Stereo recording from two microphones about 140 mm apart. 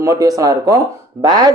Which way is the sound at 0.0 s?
25° right (ahead or behind).